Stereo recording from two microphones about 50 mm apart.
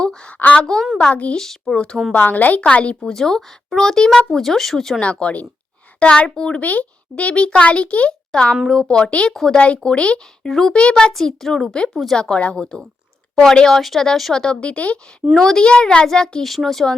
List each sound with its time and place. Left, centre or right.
0.0 s speech: centre
0.3 s a child's voice: left
1.4 s speech: centre
1.7 s a child's voice: left
2.1 s a woman's voice: left
2.6 s a child's voice: left
3.1 s speech: centre
5.2 s a child's voice: left
6.6 s a child's voice: left
9.3 s speech: centre
9.6 s a child's voice: left
14.4 s a child's voice: centre
15.4 s speech: centre
16.4 s speech: centre